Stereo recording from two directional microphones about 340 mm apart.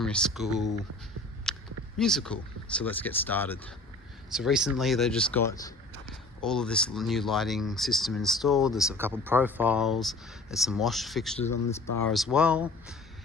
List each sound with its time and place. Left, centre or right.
0.0 s speech: centre
1.5 s a sound: centre
2.0 s speech: centre
11.3 s speech: centre
12.0 s speech: centre